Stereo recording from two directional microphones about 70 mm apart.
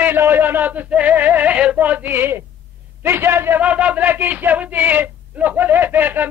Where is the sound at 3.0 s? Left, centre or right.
Right.